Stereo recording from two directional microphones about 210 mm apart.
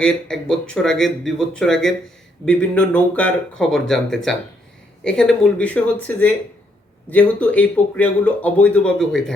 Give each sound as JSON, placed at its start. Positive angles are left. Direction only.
{"t": 0.6, "sound": "speech", "side_deg": 5}